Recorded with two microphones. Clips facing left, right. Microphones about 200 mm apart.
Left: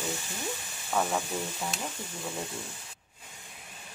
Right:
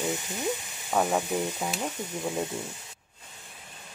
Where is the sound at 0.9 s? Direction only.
20° right (ahead or behind).